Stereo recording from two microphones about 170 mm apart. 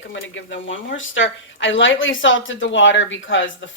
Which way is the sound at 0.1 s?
90° left.